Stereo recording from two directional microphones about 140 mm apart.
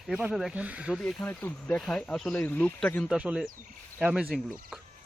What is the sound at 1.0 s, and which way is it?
Speech, 15° left (ahead or behind).